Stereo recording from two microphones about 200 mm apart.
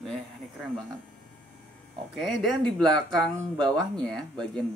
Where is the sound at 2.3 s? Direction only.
Centre (ahead or behind).